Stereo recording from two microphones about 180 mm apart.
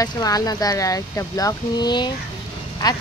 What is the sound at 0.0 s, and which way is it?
A woman's voice, 20° left (ahead or behind).